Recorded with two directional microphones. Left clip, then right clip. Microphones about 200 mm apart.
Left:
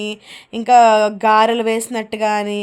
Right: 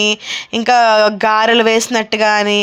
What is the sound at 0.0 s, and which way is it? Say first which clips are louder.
Speech: right 12 dB; 10° right (ahead or behind).